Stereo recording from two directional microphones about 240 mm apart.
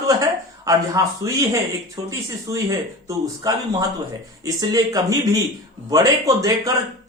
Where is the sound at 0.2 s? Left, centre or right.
Centre.